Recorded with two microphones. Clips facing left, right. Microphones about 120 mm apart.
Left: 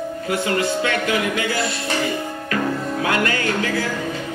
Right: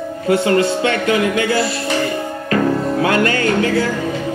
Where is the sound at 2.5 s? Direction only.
30° right (ahead or behind).